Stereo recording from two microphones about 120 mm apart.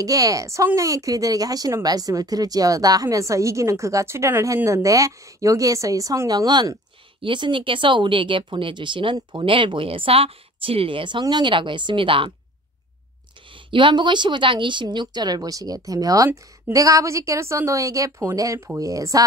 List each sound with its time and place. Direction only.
0.0 s speech: 30° right (ahead or behind); by 12.3 s 45° right (ahead or behind)
13.7 s speech: 45° right (ahead or behind); by 19.2 s 30° right (ahead or behind)